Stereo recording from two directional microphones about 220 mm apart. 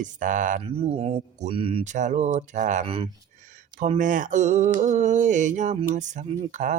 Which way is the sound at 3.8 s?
35° right (ahead or behind).